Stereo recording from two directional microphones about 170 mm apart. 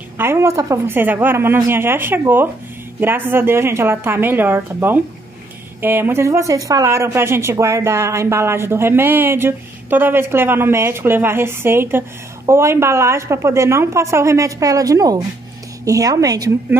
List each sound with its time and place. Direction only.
0.2 s a woman's voice: 15° right (ahead or behind)